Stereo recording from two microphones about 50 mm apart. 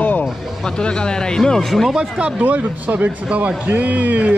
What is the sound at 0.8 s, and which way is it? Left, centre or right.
Speech, centre.